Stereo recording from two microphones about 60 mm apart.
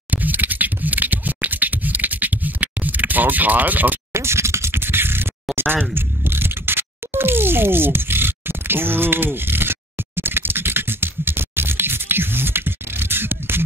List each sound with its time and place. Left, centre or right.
0.1 s scratch: right
4.1 s scratch: right
5.9 s a sound: right